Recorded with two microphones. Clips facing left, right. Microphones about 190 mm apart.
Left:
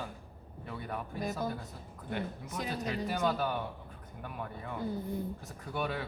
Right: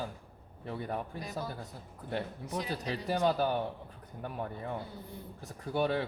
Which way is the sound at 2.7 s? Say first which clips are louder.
Even; 30° right (ahead or behind).